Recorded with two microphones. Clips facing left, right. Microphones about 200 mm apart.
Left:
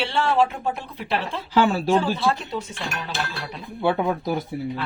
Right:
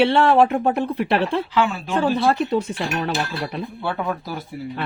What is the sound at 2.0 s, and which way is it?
Speech, 60° right (ahead or behind).